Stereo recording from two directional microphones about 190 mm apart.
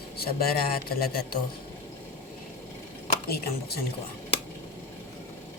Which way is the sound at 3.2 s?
55° left (ahead or behind).